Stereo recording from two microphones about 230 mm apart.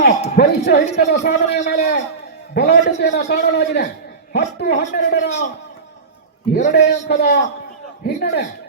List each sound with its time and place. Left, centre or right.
0.3 s a man's voice: left
6.5 s a man's voice: left